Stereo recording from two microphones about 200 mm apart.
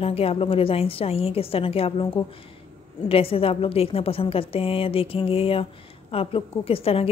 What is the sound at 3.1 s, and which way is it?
A woman's voice, 30° left (ahead or behind).